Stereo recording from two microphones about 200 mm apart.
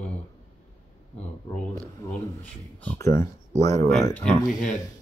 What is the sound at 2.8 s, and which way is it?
Speech, 10° left (ahead or behind).